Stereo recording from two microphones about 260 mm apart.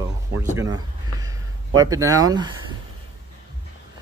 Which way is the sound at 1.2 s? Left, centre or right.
Centre.